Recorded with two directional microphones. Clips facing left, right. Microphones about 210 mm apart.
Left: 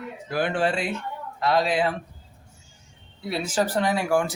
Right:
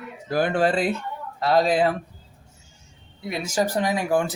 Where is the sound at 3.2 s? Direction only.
15° right (ahead or behind).